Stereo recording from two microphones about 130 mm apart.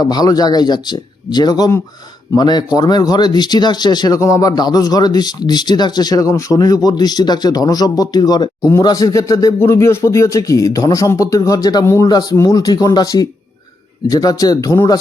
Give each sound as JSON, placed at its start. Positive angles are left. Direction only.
{"t": 0.0, "sound": "speech", "side_deg": 30}